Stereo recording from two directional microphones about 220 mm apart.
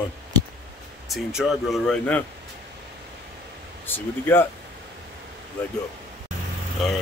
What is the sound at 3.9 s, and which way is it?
Speech, 10° left (ahead or behind).